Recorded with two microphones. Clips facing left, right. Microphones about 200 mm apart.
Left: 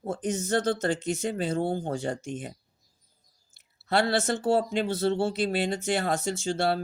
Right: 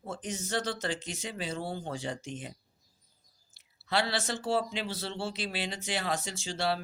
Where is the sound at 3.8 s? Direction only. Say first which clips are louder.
Left 6 dB; 50° left (ahead or behind).